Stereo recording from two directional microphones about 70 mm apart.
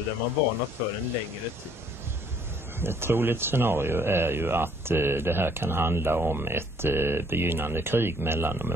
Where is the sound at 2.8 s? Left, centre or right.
Right.